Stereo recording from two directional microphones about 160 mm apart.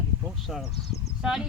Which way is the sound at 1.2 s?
Centre (ahead or behind).